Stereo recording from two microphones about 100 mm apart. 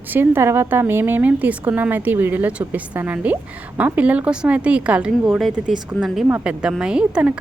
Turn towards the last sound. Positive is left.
turn(degrees=-10)  # may be behind; listen again after turning